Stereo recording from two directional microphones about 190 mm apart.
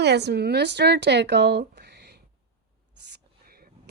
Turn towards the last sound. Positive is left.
turn(degrees=-50)  # may be behind; listen again after turning